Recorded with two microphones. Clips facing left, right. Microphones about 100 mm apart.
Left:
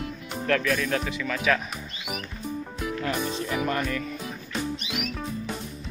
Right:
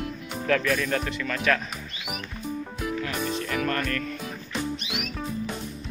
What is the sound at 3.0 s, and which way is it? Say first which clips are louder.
Music: left 1 dB; 20° left (ahead or behind).